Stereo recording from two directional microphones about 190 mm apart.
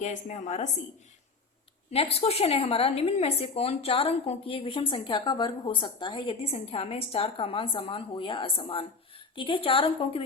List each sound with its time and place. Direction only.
0.0 s a woman's voice: 40° left (ahead or behind)
1.9 s a woman's voice: 30° left (ahead or behind)